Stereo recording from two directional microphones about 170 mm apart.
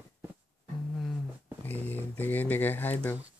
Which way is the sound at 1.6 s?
10° left (ahead or behind).